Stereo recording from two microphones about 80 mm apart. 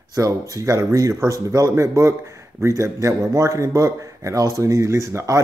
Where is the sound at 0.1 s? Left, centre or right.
Right.